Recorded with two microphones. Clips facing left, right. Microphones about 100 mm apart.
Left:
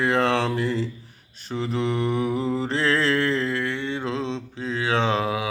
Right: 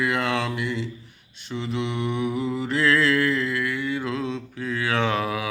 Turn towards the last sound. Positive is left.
turn(degrees=25)  # may be behind; listen again after turning